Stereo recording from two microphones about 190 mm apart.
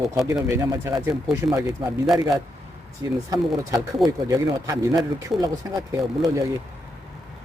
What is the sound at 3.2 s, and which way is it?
Speech, 15° right (ahead or behind).